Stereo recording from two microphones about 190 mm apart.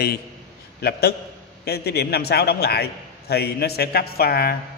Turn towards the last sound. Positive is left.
turn(degrees=55)  # may be behind; listen again after turning